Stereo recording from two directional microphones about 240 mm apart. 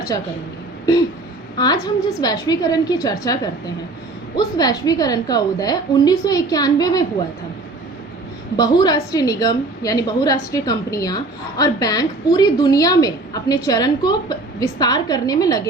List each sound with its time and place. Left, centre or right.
1.5 s a woman's voice: centre
8.5 s a woman's voice: centre